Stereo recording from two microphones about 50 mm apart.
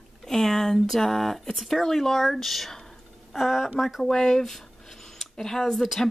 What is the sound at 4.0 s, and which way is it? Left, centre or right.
Speech, centre.